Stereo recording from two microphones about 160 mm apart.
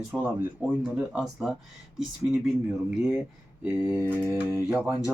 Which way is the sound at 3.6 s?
10° right (ahead or behind).